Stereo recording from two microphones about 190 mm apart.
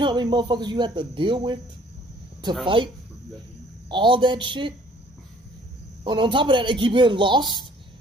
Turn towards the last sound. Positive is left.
turn(degrees=-25)  # may be behind; listen again after turning